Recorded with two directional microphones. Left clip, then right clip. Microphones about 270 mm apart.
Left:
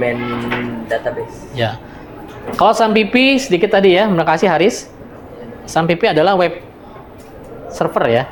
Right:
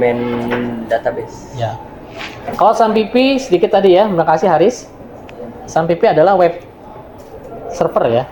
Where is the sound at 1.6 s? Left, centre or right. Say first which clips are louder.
Left 2 dB; left.